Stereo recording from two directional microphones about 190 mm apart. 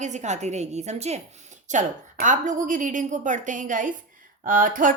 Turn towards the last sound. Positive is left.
turn(degrees=-45)  # may be behind; listen again after turning